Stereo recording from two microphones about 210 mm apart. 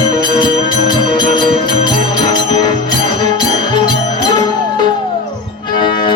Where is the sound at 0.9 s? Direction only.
20° left (ahead or behind).